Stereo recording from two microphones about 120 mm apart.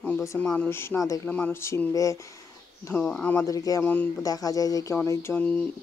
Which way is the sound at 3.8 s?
15° left (ahead or behind).